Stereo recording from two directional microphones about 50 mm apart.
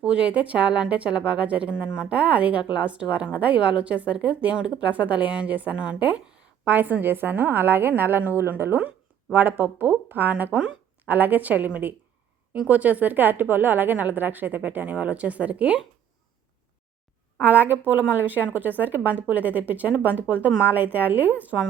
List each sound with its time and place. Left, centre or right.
0.0 s a woman's voice: right
17.4 s a woman's voice: right